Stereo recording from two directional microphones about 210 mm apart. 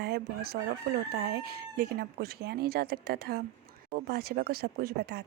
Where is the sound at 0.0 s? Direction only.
45° right (ahead or behind).